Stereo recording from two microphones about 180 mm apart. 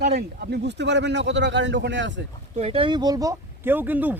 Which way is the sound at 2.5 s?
30° right (ahead or behind).